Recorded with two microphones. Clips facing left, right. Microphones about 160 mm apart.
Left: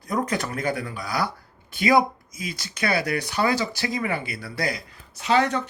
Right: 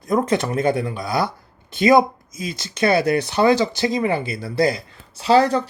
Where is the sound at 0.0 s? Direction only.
25° right (ahead or behind).